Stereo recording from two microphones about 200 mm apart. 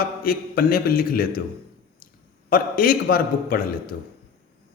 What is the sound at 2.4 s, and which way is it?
A man's voice, 45° left (ahead or behind).